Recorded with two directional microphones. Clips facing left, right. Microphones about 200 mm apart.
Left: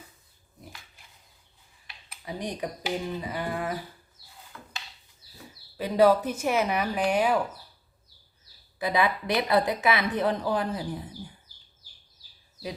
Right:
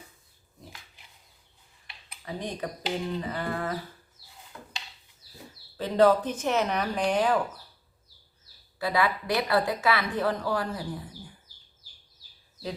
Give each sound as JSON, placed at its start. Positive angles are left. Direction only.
{"t": 2.2, "sound": "speech", "side_deg": 15}
{"t": 5.7, "sound": "speech", "side_deg": 10}
{"t": 8.8, "sound": "speech", "side_deg": 20}